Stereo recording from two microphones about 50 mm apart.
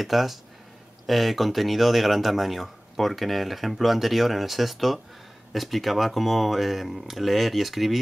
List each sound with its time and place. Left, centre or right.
0.0 s speech: centre